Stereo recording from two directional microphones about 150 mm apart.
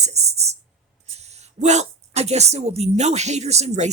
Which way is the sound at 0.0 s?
45° right (ahead or behind).